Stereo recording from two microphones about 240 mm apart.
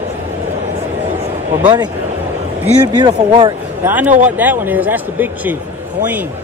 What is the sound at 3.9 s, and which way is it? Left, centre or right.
A man's voice, centre.